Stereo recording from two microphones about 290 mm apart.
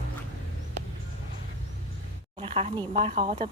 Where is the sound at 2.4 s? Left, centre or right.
Centre.